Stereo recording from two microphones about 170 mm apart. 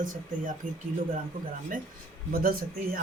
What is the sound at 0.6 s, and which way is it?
Speech, 55° right (ahead or behind).